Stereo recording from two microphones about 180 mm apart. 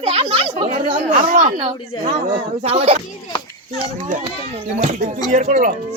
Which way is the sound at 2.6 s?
35° right (ahead or behind).